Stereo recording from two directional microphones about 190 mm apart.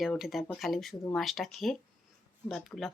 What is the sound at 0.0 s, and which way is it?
Speech, centre (ahead or behind).